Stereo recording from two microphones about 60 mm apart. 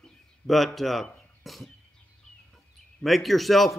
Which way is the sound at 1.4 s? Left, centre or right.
Centre.